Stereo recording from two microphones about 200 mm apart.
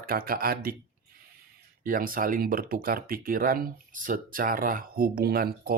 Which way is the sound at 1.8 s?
45° right (ahead or behind).